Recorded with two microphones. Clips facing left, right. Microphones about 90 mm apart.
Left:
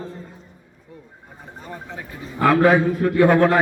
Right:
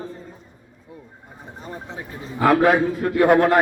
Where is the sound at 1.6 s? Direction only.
20° right (ahead or behind).